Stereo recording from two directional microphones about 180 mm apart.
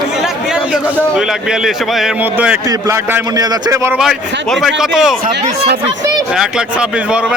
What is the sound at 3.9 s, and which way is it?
A man's voice, centre (ahead or behind).